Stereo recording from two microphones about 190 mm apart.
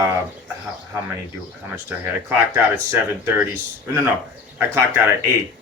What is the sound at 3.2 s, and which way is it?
Speech, 10° right (ahead or behind).